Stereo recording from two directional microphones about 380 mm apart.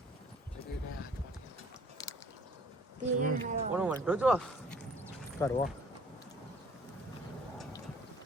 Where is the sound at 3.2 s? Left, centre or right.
Right.